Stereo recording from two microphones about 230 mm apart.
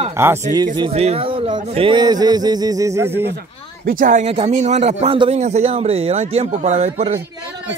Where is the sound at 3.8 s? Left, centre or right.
Right.